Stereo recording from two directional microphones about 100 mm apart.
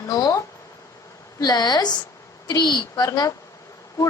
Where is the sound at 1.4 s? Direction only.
40° left (ahead or behind).